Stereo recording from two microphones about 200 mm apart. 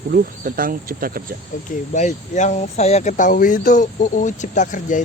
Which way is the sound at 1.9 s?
35° left (ahead or behind).